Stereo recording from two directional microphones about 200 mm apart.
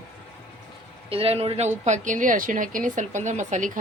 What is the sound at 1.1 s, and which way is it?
Speech, 30° right (ahead or behind).